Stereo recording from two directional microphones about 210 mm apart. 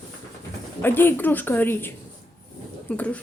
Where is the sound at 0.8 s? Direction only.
10° left (ahead or behind).